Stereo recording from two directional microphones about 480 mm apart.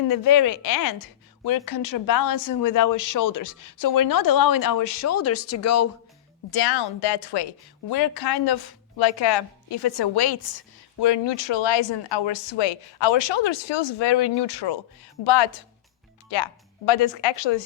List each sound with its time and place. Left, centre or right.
0.1 s speech: left
6.5 s a woman's voice: left